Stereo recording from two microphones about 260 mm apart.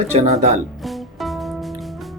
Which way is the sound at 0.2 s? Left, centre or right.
Right.